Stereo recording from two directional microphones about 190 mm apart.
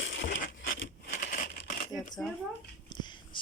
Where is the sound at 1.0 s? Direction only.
40° left (ahead or behind).